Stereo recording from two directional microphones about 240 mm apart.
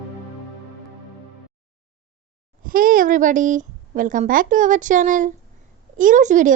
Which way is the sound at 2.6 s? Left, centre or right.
Right.